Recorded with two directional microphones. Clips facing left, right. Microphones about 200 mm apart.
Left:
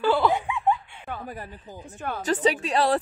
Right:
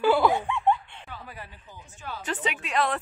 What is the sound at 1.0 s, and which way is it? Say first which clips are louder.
Speech: left 7 dB; 50° left (ahead or behind).